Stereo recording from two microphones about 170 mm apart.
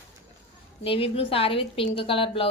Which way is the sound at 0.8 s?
35° left (ahead or behind).